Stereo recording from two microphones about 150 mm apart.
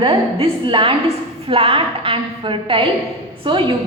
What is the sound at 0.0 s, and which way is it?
A woman's voice, 35° right (ahead or behind).